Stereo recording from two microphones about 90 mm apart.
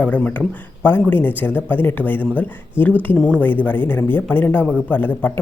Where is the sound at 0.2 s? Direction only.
15° left (ahead or behind).